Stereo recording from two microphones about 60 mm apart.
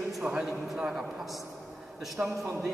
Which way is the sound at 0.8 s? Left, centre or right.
Centre.